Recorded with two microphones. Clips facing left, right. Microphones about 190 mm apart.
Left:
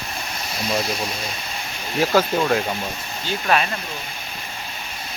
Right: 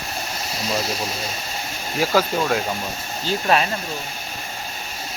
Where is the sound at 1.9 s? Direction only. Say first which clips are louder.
Left 1 dB; 5° right (ahead or behind).